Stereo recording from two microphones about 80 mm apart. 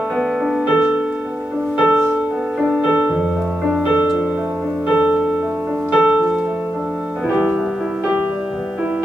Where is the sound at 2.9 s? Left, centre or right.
Centre.